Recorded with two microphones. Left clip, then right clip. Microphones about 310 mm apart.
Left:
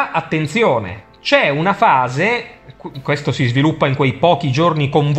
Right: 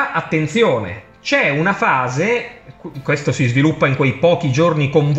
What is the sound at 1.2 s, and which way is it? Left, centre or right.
Speech, centre.